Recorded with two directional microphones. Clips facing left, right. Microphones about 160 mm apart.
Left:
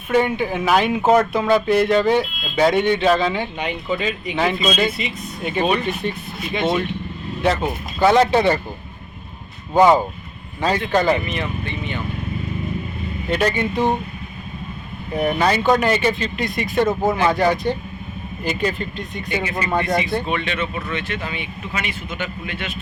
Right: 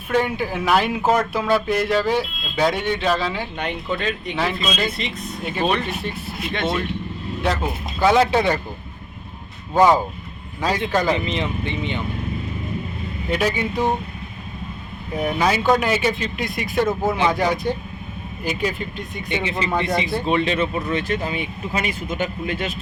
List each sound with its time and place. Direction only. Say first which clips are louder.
0.1 s speech: left 3 dB; centre (ahead or behind)
10.6 s speech: left 2 dB; 5° right (ahead or behind)
11.3 s speech: right 1 dB; 20° right (ahead or behind)
13.3 s speech: left 2 dB; 5° right (ahead or behind)
15.1 s speech: left 2 dB; 5° right (ahead or behind)
19.3 s speech: left 1 dB; 25° right (ahead or behind); by 22.7 s 40° right (ahead or behind)